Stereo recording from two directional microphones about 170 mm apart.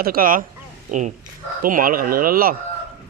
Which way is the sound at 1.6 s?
55° right (ahead or behind).